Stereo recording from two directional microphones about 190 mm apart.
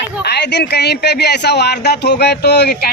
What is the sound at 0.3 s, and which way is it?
Speech, 60° left (ahead or behind).